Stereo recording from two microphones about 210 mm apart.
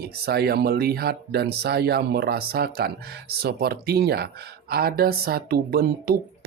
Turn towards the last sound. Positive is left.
turn(degrees=-45)  # may be behind; listen again after turning